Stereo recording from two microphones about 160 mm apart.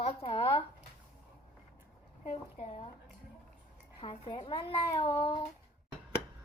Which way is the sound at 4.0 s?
30° left (ahead or behind).